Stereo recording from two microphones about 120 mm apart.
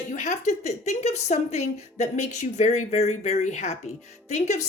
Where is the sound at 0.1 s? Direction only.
75° left (ahead or behind).